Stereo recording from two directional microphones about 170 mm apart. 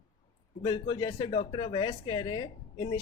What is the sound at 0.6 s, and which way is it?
Speech, 25° left (ahead or behind).